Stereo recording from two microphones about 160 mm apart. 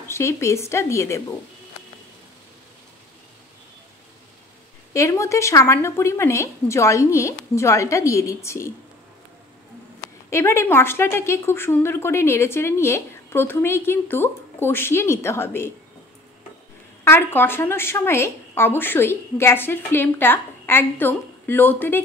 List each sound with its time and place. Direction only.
0.1 s a woman's voice: 15° left (ahead or behind)
4.9 s speech: 20° left (ahead or behind)
10.3 s a woman's voice: 15° left (ahead or behind)
17.0 s a woman's voice: 15° left (ahead or behind)